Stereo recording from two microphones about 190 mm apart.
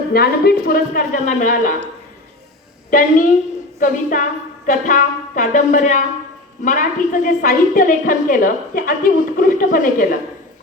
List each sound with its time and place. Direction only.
0.1 s a woman's voice: 55° left (ahead or behind)
2.9 s a woman's voice: 45° left (ahead or behind)